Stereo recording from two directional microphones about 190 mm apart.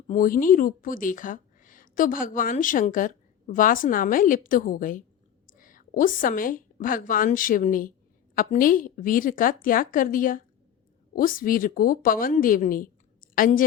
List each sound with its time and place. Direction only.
0.1 s a woman's voice: 45° left (ahead or behind)